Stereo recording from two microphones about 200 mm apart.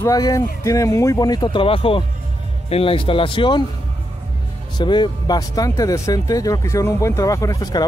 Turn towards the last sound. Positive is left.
turn(degrees=20)  # may be behind; listen again after turning